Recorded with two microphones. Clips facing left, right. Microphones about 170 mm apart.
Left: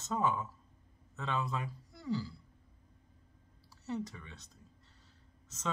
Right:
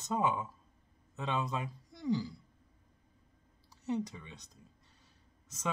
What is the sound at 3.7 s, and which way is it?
Speech, 15° right (ahead or behind).